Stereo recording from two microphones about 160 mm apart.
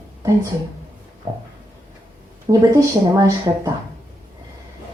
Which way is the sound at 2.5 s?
30° right (ahead or behind).